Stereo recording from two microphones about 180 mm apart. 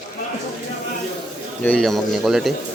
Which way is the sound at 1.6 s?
5° left (ahead or behind).